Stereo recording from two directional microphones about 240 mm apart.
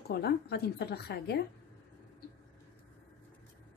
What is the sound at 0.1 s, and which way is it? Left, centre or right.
Speech, left.